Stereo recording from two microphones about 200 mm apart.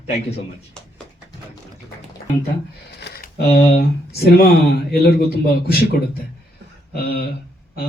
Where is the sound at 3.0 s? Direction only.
55° left (ahead or behind).